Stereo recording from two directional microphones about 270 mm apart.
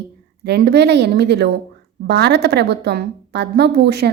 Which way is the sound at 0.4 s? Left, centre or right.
Right.